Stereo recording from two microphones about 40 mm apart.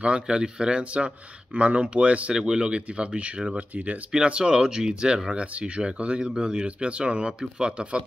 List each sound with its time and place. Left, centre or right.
0.0 s speech: right
2.3 s speech: centre; by 4.0 s right
4.1 s speech: right
5.3 s speech: right